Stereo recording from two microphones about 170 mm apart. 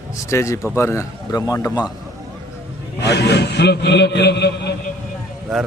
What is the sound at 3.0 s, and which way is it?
A man's voice, 80° left.